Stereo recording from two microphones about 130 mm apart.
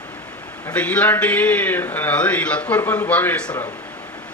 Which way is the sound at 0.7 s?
10° left (ahead or behind).